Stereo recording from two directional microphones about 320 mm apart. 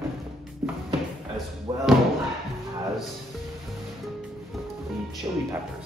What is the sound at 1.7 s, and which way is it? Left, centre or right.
Speech, centre.